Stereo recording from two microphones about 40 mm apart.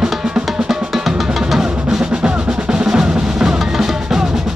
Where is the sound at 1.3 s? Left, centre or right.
Centre.